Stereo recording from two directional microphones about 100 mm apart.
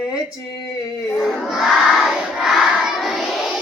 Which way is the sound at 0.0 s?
10° right (ahead or behind).